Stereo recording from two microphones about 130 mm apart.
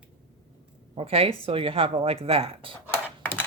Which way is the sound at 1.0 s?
50° right (ahead or behind).